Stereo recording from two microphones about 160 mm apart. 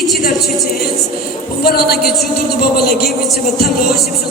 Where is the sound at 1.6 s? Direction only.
75° left (ahead or behind).